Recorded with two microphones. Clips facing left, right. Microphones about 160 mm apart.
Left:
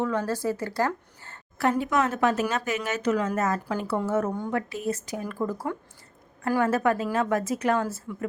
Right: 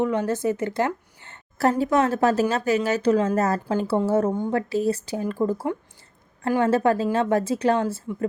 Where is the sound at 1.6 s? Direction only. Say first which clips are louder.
Right 4 dB; 35° right (ahead or behind).